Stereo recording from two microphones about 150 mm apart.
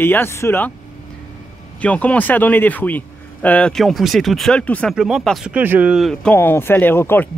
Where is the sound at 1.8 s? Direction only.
10° left (ahead or behind).